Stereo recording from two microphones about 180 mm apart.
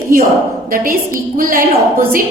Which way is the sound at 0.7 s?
50° right (ahead or behind).